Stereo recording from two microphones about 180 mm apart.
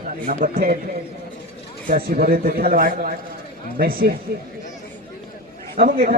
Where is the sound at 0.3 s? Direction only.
50° right (ahead or behind).